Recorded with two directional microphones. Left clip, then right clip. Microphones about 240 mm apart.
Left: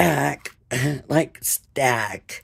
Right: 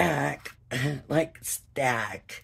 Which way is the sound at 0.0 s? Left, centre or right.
Left.